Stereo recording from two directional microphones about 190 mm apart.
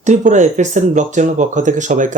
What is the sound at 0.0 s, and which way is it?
Speech, 40° right (ahead or behind).